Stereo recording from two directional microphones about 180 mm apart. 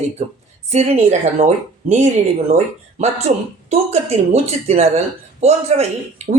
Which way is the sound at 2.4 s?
35° right (ahead or behind).